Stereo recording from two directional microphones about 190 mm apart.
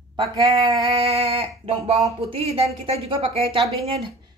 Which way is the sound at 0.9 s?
30° right (ahead or behind).